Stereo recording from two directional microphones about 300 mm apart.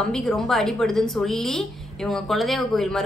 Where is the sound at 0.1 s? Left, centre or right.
Centre.